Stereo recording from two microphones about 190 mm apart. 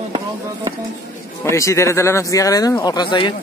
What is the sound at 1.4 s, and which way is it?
Speech, 15° left (ahead or behind).